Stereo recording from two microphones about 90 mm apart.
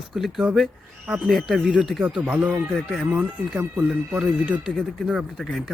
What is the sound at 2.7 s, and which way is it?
Speech, centre (ahead or behind).